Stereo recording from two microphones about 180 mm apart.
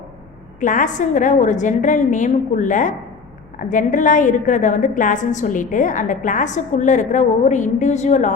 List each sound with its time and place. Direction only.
0.6 s a woman's voice: 45° left (ahead or behind)